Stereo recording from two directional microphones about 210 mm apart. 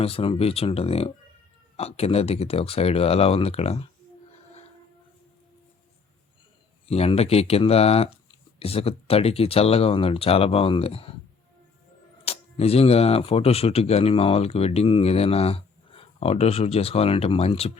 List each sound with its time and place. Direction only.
0.0 s speech: 25° left (ahead or behind)
6.8 s speech: 30° left (ahead or behind)
12.2 s speech: 30° left (ahead or behind)